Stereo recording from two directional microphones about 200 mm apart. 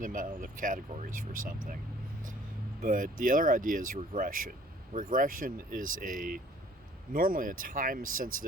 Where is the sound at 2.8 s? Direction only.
45° right (ahead or behind).